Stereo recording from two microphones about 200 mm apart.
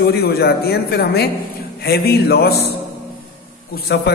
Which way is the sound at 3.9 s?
60° left (ahead or behind).